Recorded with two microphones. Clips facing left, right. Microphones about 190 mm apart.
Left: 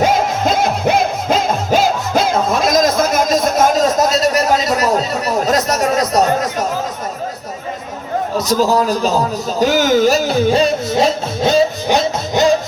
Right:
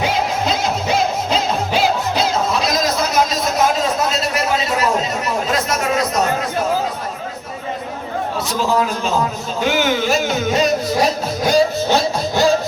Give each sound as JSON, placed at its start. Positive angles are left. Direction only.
{"t": 0.0, "sound": "music", "side_deg": 50}
{"t": 8.4, "sound": "a man's voice", "side_deg": 40}